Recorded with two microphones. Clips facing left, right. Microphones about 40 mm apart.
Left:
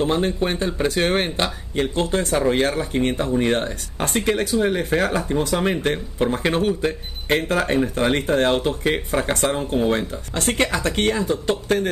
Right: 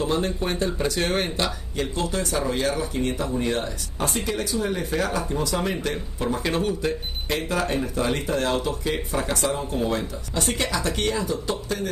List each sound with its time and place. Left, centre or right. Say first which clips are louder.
0.0 s speech: left 4 dB; left